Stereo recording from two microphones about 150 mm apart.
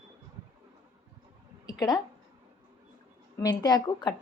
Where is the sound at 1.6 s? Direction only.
25° left (ahead or behind).